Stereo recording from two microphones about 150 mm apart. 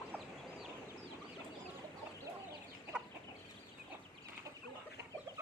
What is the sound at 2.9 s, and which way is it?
Chicken, 5° right (ahead or behind).